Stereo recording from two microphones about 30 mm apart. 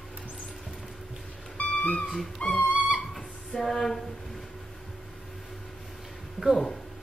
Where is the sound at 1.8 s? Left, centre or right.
Left.